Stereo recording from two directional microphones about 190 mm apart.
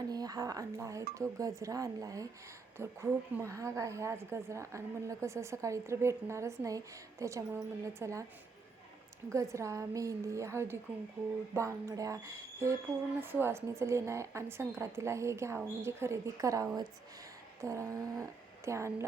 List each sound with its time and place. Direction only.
0.1 s a woman's voice: 20° right (ahead or behind)
9.3 s a woman's voice: 15° right (ahead or behind)